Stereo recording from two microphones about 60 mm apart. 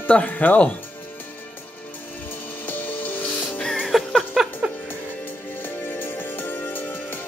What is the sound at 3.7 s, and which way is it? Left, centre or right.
Music, centre.